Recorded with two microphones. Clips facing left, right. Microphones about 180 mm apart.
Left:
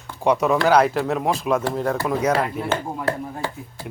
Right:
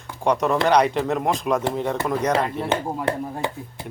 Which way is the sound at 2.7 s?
20° right (ahead or behind).